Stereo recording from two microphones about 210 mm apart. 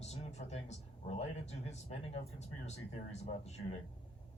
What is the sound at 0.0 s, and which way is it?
Speech, 30° left (ahead or behind).